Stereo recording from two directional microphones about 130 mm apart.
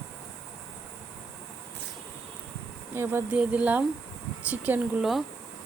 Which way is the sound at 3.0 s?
20° right (ahead or behind).